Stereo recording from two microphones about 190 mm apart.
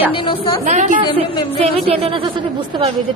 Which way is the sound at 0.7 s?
40° right (ahead or behind).